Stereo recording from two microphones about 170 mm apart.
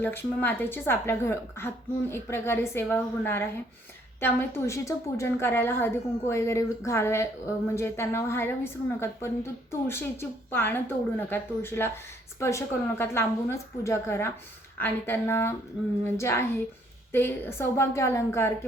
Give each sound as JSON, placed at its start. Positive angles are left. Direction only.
{"t": 0.0, "sound": "a woman's voice", "side_deg": 10}